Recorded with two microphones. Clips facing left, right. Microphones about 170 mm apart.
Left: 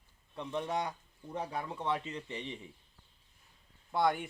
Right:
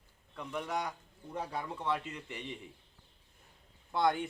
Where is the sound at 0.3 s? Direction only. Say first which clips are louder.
Left 2 dB; 25° left (ahead or behind).